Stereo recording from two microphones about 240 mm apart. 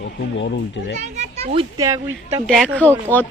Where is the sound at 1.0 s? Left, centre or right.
Right.